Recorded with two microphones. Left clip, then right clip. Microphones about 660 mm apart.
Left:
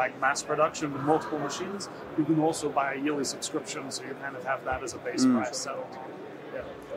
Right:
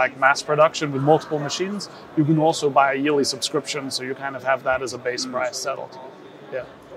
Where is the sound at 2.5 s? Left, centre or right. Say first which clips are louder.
Right 11 dB; right.